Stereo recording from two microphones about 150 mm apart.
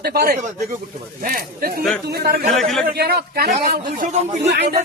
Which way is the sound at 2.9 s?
90° right.